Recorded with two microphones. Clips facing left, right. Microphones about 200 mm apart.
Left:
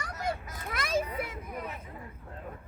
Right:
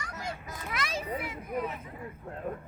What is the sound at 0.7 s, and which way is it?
Children playing, 50° left (ahead or behind).